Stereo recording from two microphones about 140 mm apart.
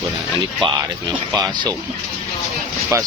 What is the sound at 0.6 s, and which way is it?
Music, 25° right (ahead or behind).